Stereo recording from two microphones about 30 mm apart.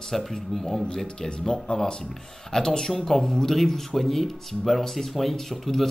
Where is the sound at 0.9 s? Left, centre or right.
Left.